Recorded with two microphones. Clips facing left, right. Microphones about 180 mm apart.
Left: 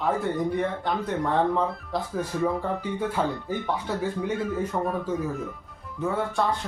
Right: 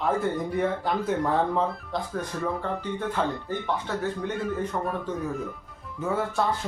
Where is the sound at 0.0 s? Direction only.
Centre (ahead or behind).